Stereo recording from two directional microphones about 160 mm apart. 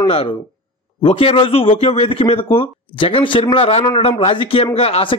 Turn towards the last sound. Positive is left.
turn(degrees=40)  # may be behind; listen again after turning